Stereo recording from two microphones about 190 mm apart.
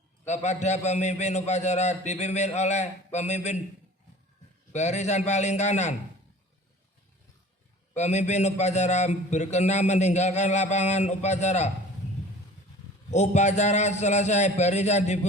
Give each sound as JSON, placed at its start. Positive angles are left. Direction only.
{"t": 0.3, "sound": "a man's voice", "side_deg": 35}
{"t": 4.7, "sound": "a man's voice", "side_deg": 35}
{"t": 7.9, "sound": "a man's voice", "side_deg": 35}
{"t": 13.1, "sound": "a man's voice", "side_deg": 35}